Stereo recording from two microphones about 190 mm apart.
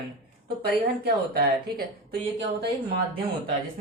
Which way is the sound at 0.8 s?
55° right (ahead or behind).